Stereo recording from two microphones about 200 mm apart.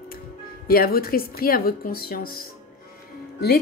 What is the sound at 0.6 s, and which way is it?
A woman's voice, 45° left (ahead or behind).